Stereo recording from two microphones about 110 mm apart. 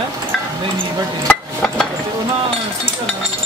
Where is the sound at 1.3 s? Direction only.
5° left (ahead or behind).